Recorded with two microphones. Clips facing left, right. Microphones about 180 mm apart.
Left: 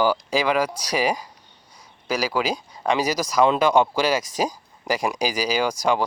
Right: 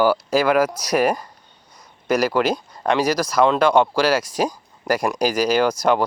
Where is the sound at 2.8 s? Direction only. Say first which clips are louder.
Right 3 dB; centre (ahead or behind).